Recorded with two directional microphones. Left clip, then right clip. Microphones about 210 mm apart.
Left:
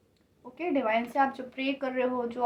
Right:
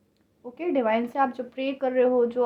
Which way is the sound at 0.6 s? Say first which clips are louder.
Right 3 dB; 50° right (ahead or behind).